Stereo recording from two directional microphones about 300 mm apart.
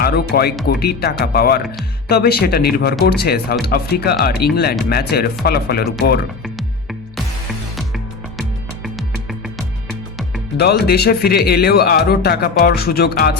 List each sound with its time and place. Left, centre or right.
0.0 s music: left
0.7 s speech: left
7.8 s music: centre
10.6 s speech: left